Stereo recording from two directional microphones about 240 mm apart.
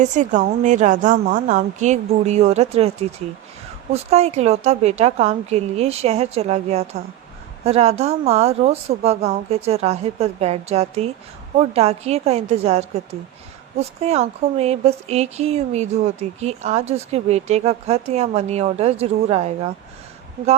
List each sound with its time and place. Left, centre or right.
0.0 s a woman's voice: right